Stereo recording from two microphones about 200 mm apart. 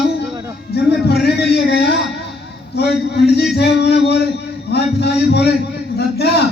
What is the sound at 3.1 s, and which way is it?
A man's voice, 55° left (ahead or behind).